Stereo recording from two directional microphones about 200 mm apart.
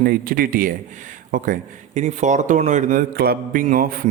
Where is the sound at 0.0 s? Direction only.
50° right (ahead or behind).